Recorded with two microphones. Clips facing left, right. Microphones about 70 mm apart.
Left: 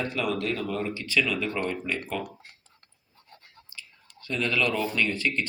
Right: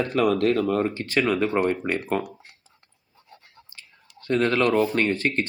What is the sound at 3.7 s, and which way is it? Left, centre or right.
Speech, right.